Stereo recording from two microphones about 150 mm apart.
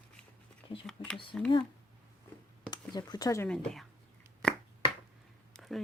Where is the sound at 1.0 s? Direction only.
35° left (ahead or behind).